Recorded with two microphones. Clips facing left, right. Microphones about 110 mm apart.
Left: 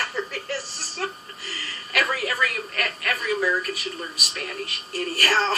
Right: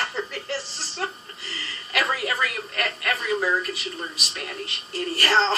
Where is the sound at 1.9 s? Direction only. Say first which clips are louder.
Even; 25° right (ahead or behind).